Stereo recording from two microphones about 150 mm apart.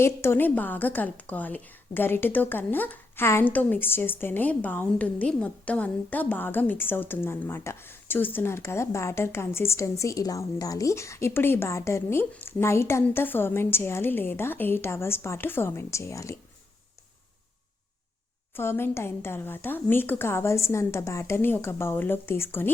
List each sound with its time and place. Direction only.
0.0 s a woman's voice: 15° left (ahead or behind)
18.5 s a woman's voice: 15° left (ahead or behind)